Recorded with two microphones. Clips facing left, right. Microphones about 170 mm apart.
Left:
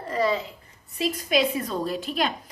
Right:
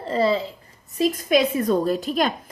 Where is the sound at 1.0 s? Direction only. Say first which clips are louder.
Right 4 dB; 45° right (ahead or behind).